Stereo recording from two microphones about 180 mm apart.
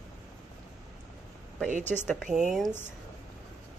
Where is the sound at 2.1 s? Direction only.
5° right (ahead or behind).